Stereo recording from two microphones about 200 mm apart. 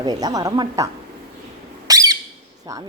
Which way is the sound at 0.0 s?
20° right (ahead or behind).